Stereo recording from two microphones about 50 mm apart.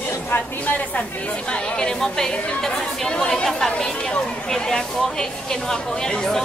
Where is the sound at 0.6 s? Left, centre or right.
Left.